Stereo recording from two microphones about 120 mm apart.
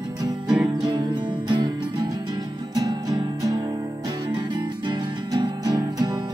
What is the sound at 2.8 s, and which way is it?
Music, 35° right (ahead or behind).